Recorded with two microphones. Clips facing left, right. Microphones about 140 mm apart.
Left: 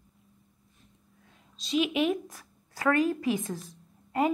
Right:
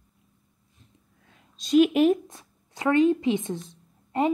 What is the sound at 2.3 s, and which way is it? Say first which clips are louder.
Speech: right 1 dB; 25° right (ahead or behind).